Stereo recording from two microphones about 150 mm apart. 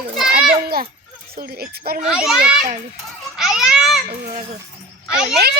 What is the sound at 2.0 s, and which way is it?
Speech, 5° right (ahead or behind).